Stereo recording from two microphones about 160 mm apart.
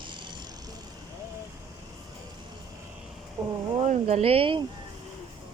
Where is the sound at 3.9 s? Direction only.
45° right (ahead or behind).